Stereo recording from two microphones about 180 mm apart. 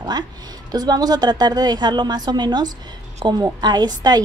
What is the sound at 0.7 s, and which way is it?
A woman's voice, 20° right (ahead or behind).